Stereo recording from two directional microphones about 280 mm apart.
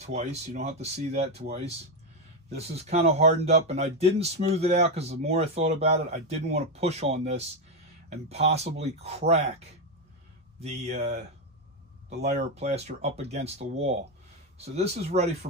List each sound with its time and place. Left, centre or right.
0.0 s speech: right
10.6 s speech: right